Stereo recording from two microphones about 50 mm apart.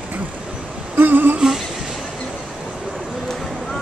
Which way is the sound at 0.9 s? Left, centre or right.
Right.